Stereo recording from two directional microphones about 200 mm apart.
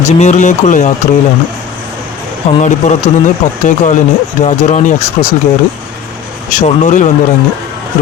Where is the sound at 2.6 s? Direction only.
35° left (ahead or behind).